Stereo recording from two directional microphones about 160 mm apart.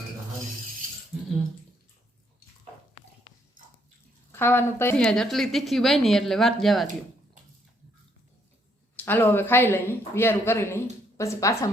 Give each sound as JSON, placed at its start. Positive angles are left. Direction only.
{"t": 4.3, "sound": "a woman's voice", "side_deg": 15}
{"t": 5.0, "sound": "a woman's voice", "side_deg": 5}
{"t": 9.0, "sound": "a woman's voice", "side_deg": 10}